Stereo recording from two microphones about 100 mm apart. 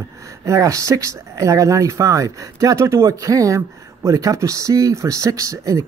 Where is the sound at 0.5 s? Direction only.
35° right (ahead or behind).